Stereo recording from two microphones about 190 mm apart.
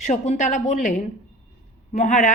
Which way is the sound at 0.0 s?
40° left (ahead or behind).